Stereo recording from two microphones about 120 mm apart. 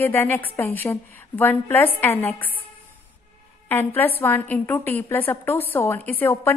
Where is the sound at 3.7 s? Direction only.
15° left (ahead or behind).